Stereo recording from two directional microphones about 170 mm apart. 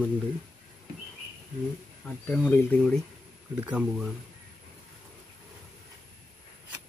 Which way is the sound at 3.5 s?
5° right (ahead or behind).